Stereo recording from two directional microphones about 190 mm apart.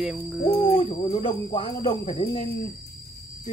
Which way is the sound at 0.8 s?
30° left (ahead or behind).